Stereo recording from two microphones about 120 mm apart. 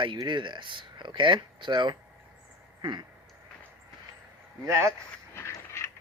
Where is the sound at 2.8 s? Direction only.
40° right (ahead or behind).